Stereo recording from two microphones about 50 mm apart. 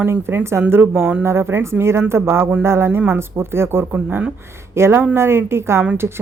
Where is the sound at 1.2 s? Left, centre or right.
Right.